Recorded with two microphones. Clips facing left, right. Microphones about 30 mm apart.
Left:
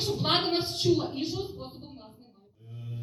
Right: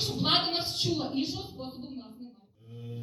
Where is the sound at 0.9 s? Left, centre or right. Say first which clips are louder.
Left 2 dB; right.